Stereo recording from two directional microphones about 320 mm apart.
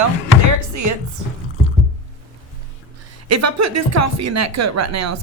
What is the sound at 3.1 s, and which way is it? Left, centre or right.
A woman's voice, right.